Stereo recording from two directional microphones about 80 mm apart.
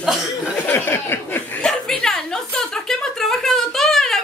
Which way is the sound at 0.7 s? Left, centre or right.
Left.